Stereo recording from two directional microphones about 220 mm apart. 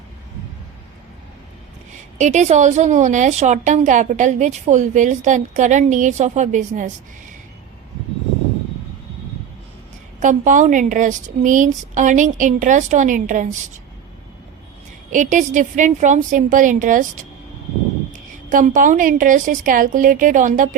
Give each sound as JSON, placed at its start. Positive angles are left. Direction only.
{"t": 2.1, "sound": "a woman's voice", "side_deg": -35}
{"t": 10.2, "sound": "a woman's voice", "side_deg": -35}
{"t": 15.1, "sound": "a woman's voice", "side_deg": -35}
{"t": 18.1, "sound": "a woman's voice", "side_deg": -35}